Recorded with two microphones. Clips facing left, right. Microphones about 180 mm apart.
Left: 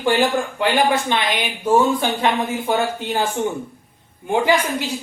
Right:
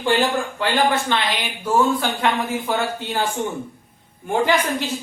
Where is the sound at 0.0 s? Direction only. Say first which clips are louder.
Left 2 dB; 15° left (ahead or behind).